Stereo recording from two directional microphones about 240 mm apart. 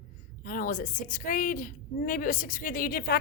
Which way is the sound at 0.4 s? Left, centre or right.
Left.